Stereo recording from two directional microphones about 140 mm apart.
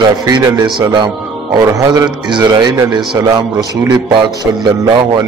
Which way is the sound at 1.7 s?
25° right (ahead or behind).